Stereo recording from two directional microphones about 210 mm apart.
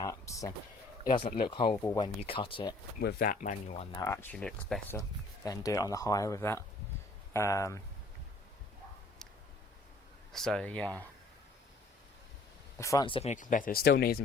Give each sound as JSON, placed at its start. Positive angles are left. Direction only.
{"t": 0.0, "sound": "a sound", "side_deg": 15}
{"t": 1.1, "sound": "speech", "side_deg": 25}
{"t": 1.8, "sound": "speech", "side_deg": 10}
{"t": 2.2, "sound": "speech", "side_deg": 25}
{"t": 3.0, "sound": "speech", "side_deg": 45}
{"t": 3.9, "sound": "speech", "side_deg": 15}
{"t": 4.9, "sound": "speech", "side_deg": 15}
{"t": 10.3, "sound": "speech", "side_deg": 0}
{"t": 12.8, "sound": "speech", "side_deg": 15}